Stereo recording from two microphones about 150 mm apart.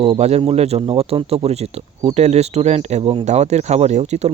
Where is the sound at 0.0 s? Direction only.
45° right (ahead or behind).